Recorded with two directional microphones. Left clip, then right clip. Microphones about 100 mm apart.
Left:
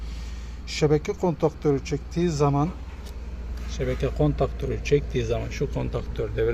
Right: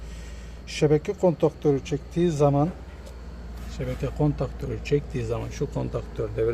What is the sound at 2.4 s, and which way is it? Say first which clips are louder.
Speech: right 2 dB; 30° left (ahead or behind).